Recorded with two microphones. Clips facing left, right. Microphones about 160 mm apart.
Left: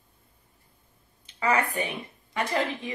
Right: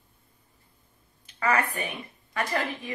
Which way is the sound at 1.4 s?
20° left (ahead or behind).